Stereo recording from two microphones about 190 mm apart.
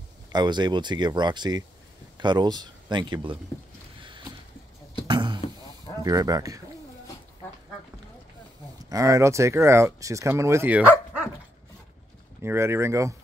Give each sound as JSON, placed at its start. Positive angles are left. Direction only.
{"t": 0.3, "sound": "speech", "side_deg": -20}
{"t": 4.0, "sound": "boat", "side_deg": -25}
{"t": 5.0, "sound": "a sound", "side_deg": -25}
{"t": 6.0, "sound": "speech", "side_deg": -20}
{"t": 8.8, "sound": "speech", "side_deg": -15}
{"t": 12.4, "sound": "speech", "side_deg": -15}